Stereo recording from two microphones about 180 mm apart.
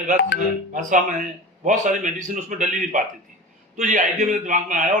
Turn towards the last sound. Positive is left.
turn(degrees=-45)  # may be behind; listen again after turning